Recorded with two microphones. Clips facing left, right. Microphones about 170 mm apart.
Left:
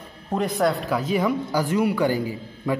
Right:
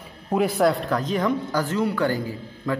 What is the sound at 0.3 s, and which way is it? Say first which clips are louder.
A man's voice: right 2 dB; 5° right (ahead or behind).